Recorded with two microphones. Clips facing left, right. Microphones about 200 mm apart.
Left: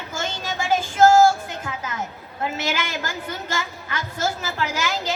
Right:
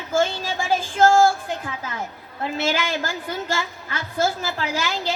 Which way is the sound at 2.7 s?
35° right (ahead or behind).